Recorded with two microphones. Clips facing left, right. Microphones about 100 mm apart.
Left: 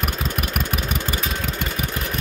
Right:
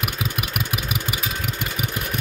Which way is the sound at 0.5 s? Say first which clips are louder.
Left 2 dB; 10° right (ahead or behind).